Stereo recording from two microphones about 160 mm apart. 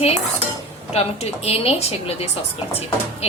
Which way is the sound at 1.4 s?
40° left (ahead or behind).